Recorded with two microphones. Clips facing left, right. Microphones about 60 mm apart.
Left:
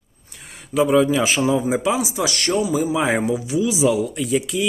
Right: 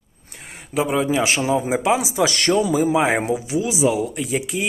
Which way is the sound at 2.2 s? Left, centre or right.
Right.